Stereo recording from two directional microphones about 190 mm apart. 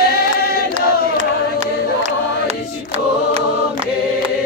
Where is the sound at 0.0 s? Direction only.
55° left (ahead or behind).